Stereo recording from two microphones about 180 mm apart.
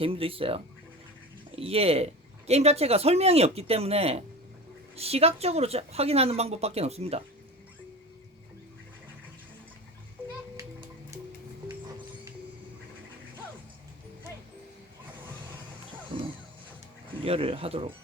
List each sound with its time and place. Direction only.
0.0 s speech: 30° right (ahead or behind)
17.2 s speech: 30° right (ahead or behind)